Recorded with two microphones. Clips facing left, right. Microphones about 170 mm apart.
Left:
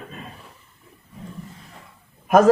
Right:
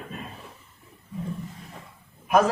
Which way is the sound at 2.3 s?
45° left (ahead or behind).